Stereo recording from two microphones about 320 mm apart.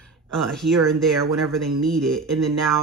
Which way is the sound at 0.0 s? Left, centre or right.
Centre.